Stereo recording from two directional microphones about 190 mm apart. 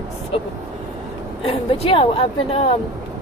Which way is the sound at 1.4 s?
30° left (ahead or behind).